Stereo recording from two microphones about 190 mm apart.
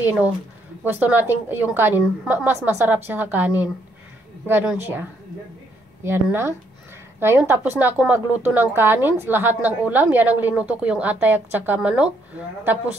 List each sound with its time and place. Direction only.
0.0 s a woman's voice: 10° right (ahead or behind)
6.0 s a woman's voice: 10° right (ahead or behind)